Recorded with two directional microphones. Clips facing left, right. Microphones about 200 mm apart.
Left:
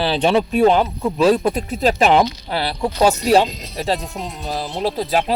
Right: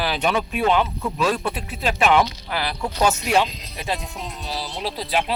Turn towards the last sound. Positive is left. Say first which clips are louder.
# left 5 dB
turn(degrees=45)  # may be behind; listen again after turning